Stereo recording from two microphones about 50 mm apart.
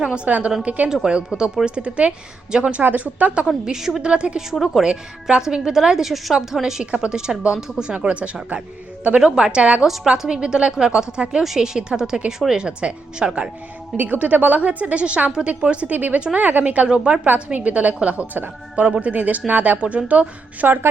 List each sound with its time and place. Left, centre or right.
0.0 s a woman's voice: right
1.0 s a woman's voice: centre
2.8 s a woman's voice: right
3.7 s a woman's voice: centre
9.8 s a woman's voice: centre
10.2 s a woman's voice: centre
13.9 s a woman's voice: right
15.3 s a woman's voice: centre
15.6 s a woman's voice: right
16.0 s a woman's voice: right
18.3 s speech: right
19.8 s a woman's voice: right